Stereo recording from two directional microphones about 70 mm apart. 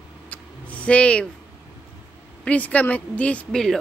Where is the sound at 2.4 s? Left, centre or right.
Left.